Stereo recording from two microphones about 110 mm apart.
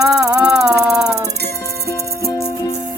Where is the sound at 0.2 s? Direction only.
30° right (ahead or behind).